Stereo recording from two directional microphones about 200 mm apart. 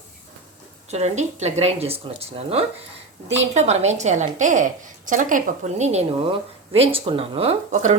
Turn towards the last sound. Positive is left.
turn(degrees=-35)  # may be behind; listen again after turning